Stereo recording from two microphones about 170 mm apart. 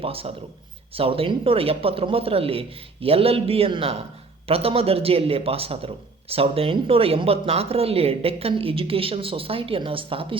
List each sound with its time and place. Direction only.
0.0 s speech: 35° right (ahead or behind)